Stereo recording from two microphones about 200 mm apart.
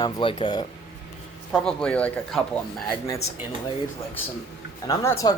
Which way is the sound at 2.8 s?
15° left (ahead or behind).